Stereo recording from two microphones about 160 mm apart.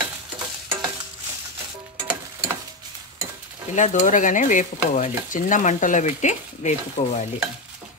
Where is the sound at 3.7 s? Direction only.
50° left (ahead or behind).